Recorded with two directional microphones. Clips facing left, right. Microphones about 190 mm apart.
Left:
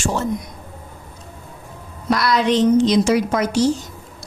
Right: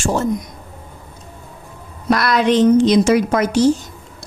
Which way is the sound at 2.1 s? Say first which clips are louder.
Right 2 dB; 55° right (ahead or behind).